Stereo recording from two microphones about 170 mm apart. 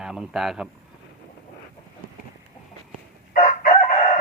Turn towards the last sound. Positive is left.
turn(degrees=45)  # may be behind; listen again after turning